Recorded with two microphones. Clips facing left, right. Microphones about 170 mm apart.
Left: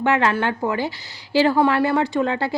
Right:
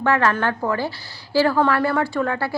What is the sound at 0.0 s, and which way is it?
A woman's voice, 20° left (ahead or behind).